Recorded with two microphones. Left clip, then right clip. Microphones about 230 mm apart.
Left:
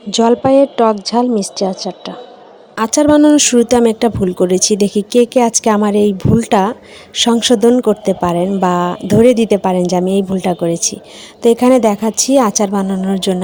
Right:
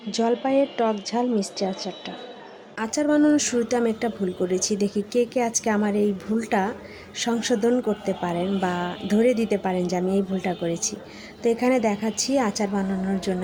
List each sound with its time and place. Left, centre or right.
0.1 s speech: left